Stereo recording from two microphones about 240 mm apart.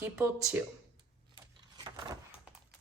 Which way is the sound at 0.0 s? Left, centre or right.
Centre.